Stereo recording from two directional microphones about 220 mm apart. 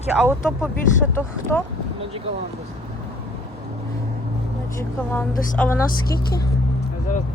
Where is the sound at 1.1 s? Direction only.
10° left (ahead or behind).